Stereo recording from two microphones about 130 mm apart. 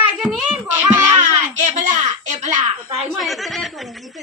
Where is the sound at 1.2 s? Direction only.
65° right (ahead or behind).